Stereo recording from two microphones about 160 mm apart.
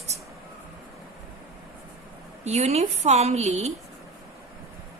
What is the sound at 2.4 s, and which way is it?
A woman's voice, 45° right (ahead or behind).